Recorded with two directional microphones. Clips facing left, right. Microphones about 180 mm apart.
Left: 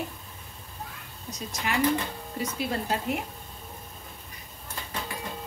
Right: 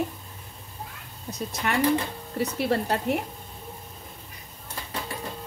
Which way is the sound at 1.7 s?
55° right (ahead or behind).